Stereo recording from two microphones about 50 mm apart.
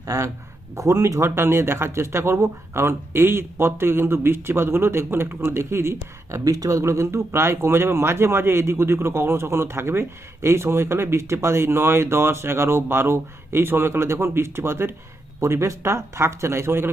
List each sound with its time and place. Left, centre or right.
0.0 s speech: right
15.4 s speech: right